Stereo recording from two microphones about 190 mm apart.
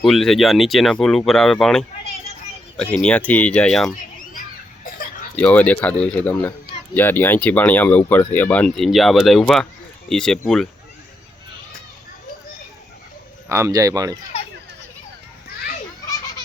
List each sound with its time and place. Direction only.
0.0 s speech: centre (ahead or behind)
4.9 s a sound: 50° left (ahead or behind)
5.4 s speech: 5° left (ahead or behind)
13.5 s speech: 15° right (ahead or behind)